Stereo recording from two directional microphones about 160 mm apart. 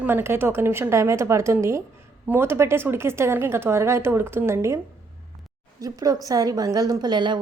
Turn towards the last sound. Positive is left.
turn(degrees=-30)  # may be behind; listen again after turning